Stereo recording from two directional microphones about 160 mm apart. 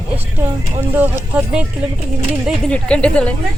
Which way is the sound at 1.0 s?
5° right (ahead or behind).